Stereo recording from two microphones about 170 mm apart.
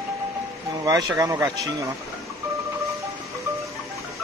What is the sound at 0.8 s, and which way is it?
Speech, 20° right (ahead or behind).